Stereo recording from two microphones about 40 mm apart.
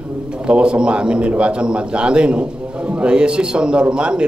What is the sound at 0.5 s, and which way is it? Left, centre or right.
A man's voice, right.